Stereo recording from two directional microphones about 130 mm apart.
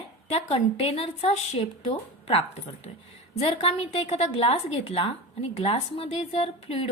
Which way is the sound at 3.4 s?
50° left (ahead or behind).